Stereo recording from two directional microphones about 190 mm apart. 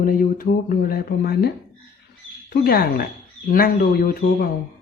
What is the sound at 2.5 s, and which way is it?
Speech, 50° left (ahead or behind).